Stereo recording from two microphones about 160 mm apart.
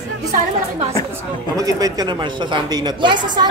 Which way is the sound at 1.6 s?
25° right (ahead or behind).